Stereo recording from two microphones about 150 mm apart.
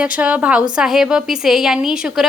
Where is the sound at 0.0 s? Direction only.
10° right (ahead or behind).